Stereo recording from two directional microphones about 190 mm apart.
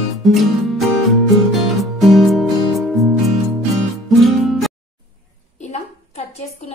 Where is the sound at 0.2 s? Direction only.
Centre (ahead or behind).